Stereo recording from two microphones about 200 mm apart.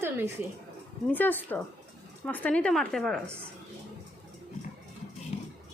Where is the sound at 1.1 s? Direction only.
10° left (ahead or behind).